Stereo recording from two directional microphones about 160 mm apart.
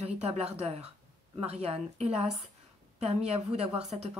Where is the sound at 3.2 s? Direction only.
40° right (ahead or behind).